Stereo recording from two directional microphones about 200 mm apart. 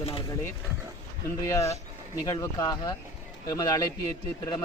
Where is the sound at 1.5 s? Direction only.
15° left (ahead or behind).